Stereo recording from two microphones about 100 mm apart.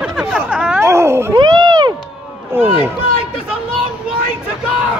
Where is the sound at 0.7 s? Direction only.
25° right (ahead or behind).